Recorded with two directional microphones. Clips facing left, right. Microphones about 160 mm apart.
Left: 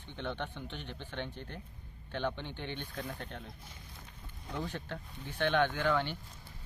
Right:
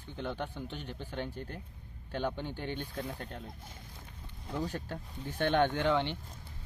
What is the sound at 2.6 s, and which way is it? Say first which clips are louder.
Speech: right 3 dB; 40° right (ahead or behind).